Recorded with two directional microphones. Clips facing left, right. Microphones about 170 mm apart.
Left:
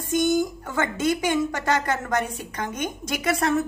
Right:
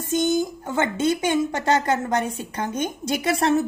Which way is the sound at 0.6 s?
25° right (ahead or behind).